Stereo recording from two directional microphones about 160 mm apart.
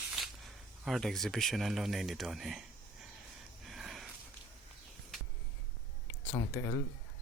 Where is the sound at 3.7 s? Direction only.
Centre (ahead or behind).